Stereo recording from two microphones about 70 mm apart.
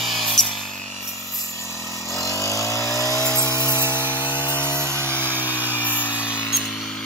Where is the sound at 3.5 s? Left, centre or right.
Left.